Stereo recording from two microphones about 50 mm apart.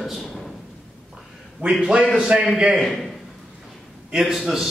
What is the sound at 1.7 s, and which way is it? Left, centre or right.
Speech, centre.